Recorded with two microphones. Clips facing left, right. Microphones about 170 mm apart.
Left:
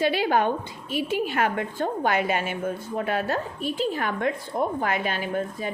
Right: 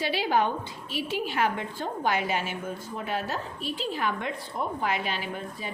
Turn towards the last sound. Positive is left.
turn(degrees=45)  # may be behind; listen again after turning